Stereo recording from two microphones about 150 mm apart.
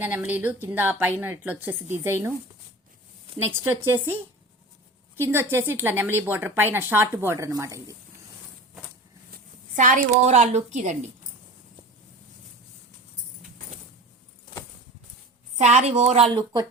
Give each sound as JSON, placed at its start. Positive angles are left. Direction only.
{"t": 0.0, "sound": "speech", "side_deg": -15}
{"t": 3.5, "sound": "speech", "side_deg": -15}
{"t": 9.7, "sound": "a woman's voice", "side_deg": -60}
{"t": 15.5, "sound": "a woman's voice", "side_deg": -50}